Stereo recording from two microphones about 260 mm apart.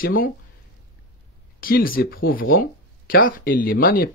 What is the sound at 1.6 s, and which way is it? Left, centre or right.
Speech, left.